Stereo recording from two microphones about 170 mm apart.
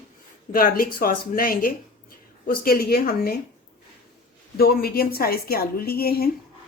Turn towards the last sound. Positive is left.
turn(degrees=65)  # may be behind; listen again after turning